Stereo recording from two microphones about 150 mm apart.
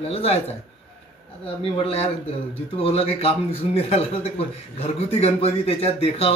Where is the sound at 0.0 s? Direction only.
45° left (ahead or behind).